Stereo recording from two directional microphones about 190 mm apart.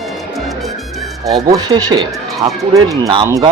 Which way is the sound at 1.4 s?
20° right (ahead or behind).